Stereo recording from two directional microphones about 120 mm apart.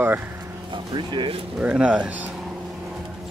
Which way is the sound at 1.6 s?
10° right (ahead or behind).